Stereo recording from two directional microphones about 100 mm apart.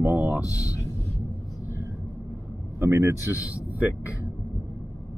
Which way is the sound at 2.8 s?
25° right (ahead or behind).